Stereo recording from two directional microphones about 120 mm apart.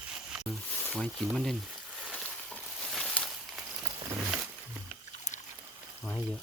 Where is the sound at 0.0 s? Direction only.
10° right (ahead or behind).